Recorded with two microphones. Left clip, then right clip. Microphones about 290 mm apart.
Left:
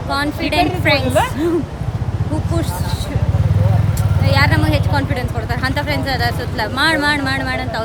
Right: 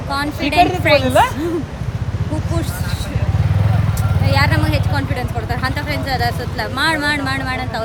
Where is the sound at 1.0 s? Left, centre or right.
Right.